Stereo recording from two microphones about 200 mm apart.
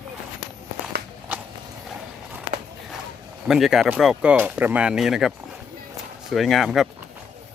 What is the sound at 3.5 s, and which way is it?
Speech, centre (ahead or behind).